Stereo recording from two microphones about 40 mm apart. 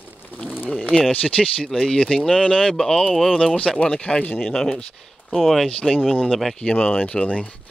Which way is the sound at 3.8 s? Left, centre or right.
Centre.